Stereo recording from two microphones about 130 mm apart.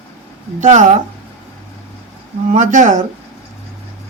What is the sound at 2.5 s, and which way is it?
Speech, 80° right.